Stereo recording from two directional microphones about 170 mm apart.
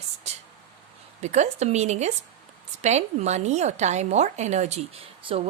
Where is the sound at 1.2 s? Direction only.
40° right (ahead or behind).